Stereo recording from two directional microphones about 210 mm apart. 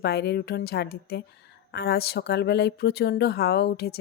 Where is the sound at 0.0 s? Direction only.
50° left (ahead or behind).